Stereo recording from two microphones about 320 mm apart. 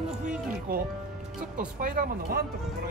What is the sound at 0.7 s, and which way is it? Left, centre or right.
Speech, right.